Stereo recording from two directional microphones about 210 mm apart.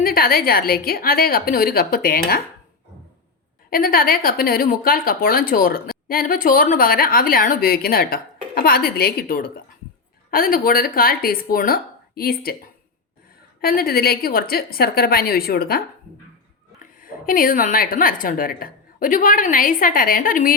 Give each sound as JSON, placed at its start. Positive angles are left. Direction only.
{"t": 0.0, "sound": "a woman's voice", "side_deg": 45}
{"t": 3.7, "sound": "a woman's voice", "side_deg": 45}
{"t": 13.6, "sound": "a woman's voice", "side_deg": 45}
{"t": 17.0, "sound": "a woman's voice", "side_deg": 40}